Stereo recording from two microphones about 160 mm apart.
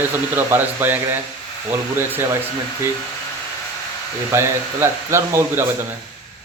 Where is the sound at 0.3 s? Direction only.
10° right (ahead or behind).